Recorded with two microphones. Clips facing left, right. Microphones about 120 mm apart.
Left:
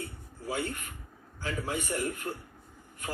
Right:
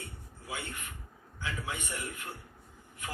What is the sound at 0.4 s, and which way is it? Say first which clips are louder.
Speech: left 7 dB; 40° left (ahead or behind).